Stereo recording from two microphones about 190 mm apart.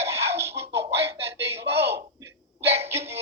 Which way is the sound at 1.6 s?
60° right (ahead or behind).